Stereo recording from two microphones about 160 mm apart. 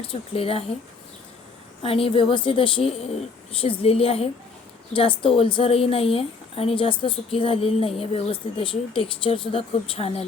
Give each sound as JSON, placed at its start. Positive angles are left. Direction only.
{"t": 0.1, "sound": "a woman's voice", "side_deg": 35}
{"t": 1.8, "sound": "a woman's voice", "side_deg": 35}